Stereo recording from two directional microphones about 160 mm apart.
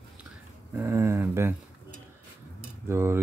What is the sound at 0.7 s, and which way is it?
Speech, 15° right (ahead or behind).